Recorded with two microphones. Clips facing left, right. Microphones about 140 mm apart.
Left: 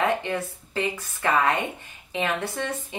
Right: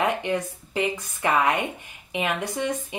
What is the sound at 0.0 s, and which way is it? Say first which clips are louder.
Speech: even; 15° right (ahead or behind).